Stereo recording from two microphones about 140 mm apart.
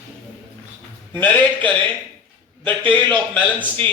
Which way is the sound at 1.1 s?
10° left (ahead or behind).